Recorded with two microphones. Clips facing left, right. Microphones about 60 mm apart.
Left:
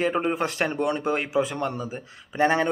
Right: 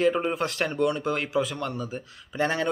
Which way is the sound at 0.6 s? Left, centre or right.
Left.